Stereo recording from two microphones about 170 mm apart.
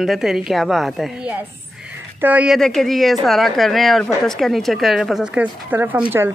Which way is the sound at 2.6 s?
Centre (ahead or behind).